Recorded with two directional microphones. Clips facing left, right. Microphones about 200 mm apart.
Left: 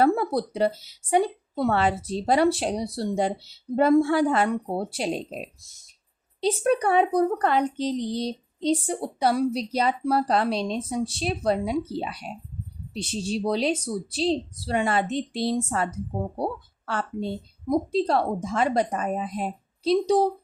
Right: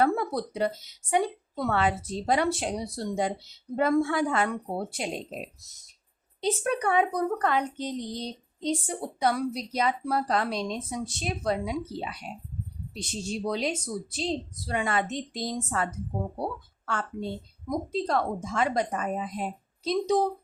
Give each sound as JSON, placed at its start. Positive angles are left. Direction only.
{"t": 0.0, "sound": "a woman's voice", "side_deg": 35}
{"t": 6.4, "sound": "a woman's voice", "side_deg": 35}